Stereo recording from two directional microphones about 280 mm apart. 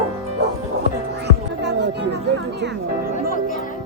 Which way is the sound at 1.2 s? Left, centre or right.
Right.